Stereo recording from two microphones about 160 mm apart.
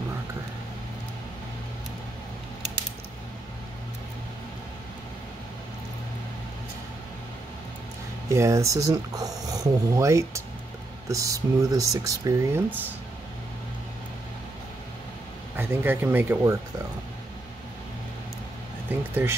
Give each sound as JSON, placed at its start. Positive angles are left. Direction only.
{"t": 8.3, "sound": "speech", "side_deg": -20}
{"t": 15.5, "sound": "speech", "side_deg": -15}
{"t": 18.9, "sound": "speech", "side_deg": -10}